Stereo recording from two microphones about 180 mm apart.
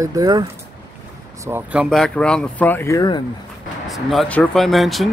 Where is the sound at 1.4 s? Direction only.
10° right (ahead or behind); by 3.2 s 20° left (ahead or behind).